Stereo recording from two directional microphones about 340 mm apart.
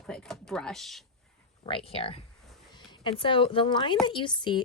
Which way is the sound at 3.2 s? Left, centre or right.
Centre.